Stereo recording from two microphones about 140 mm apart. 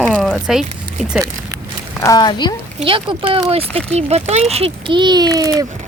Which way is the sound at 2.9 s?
35° right (ahead or behind).